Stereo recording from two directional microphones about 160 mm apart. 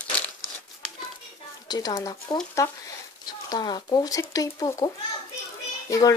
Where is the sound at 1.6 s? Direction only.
25° left (ahead or behind).